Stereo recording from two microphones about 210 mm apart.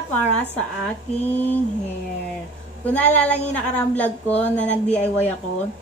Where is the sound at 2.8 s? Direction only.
5° left (ahead or behind).